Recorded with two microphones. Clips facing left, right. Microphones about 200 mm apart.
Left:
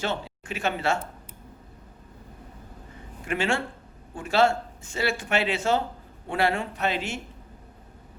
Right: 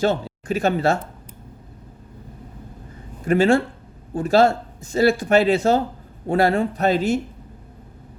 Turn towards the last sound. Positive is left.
turn(degrees=-40)  # may be behind; listen again after turning